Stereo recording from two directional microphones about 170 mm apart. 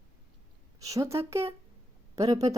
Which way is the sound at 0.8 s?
20° right (ahead or behind).